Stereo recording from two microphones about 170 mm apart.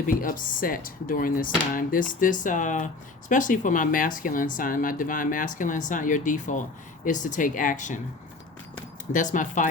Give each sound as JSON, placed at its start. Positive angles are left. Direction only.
{"t": 0.1, "sound": "speech", "side_deg": 55}
{"t": 9.1, "sound": "speech", "side_deg": 50}